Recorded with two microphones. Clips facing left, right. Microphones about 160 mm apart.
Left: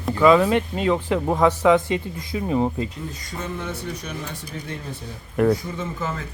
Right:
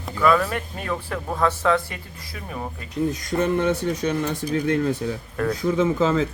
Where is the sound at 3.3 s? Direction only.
70° right (ahead or behind); by 6.3 s 90° right.